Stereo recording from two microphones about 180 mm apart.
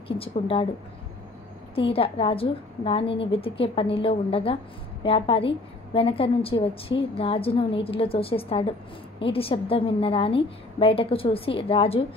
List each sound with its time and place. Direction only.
0.2 s a woman's voice: 30° left (ahead or behind)
1.8 s a woman's voice: 30° left (ahead or behind)